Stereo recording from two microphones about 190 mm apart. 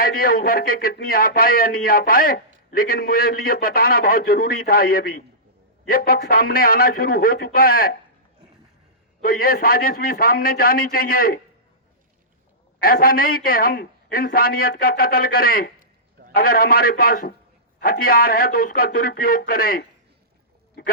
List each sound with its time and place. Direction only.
0.0 s a man's voice: 50° left (ahead or behind)
9.2 s a man's voice: 50° left (ahead or behind)
12.8 s a man's voice: 50° left (ahead or behind)